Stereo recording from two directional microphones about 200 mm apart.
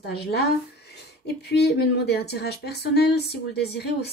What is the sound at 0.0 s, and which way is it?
Speech, 55° left (ahead or behind).